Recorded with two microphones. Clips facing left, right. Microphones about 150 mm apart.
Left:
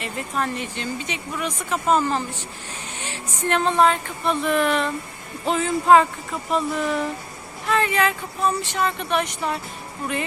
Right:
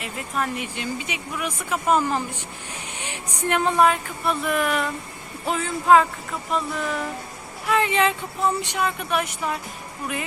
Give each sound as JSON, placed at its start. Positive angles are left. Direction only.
{"t": 0.0, "sound": "speech", "side_deg": -5}
{"t": 7.7, "sound": "speech", "side_deg": -20}